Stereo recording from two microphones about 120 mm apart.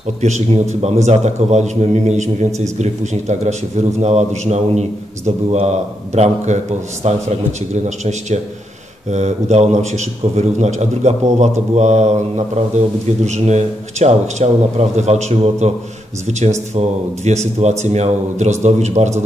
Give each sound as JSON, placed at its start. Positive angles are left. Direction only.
{"t": 0.0, "sound": "a man's voice", "side_deg": -70}